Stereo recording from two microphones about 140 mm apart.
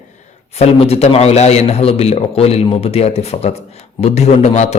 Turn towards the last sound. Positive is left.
turn(degrees=50)  # may be behind; listen again after turning